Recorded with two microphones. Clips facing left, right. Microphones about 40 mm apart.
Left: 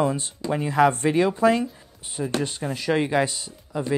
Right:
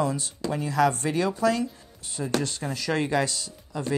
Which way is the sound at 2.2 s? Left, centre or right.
Centre.